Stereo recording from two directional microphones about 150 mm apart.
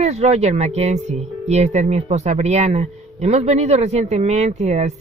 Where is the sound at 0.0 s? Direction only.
50° right (ahead or behind).